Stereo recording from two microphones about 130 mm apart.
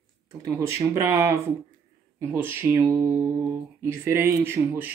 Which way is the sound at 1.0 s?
25° right (ahead or behind).